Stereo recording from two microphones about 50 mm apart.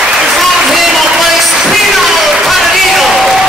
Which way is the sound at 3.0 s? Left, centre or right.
Centre.